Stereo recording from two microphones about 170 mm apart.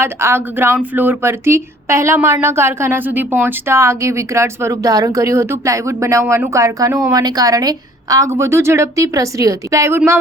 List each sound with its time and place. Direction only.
0.0 s speech: 15° right (ahead or behind)